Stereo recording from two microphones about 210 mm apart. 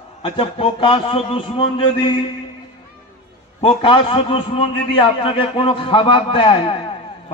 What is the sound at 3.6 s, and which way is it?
A man's voice, 25° left (ahead or behind).